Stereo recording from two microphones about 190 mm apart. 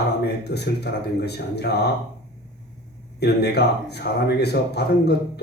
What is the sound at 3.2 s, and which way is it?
Speech, 60° left (ahead or behind).